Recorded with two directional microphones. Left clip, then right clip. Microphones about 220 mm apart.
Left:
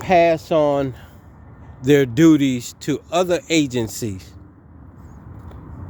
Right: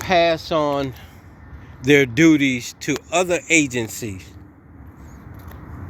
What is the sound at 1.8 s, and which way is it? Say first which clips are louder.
Speech: even; 20° left (ahead or behind).